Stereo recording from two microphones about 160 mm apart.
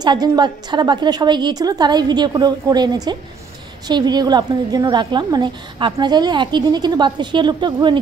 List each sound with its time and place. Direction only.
0.0 s a woman's voice: 25° right (ahead or behind)